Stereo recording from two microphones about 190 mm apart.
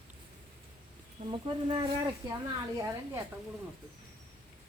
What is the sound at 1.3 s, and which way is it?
Speech, 25° right (ahead or behind).